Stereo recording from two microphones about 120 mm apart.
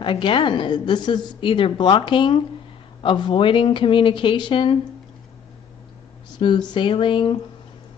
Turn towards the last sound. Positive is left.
turn(degrees=45)  # may be behind; listen again after turning